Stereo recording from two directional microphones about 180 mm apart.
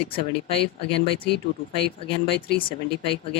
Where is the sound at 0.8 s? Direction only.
30° left (ahead or behind).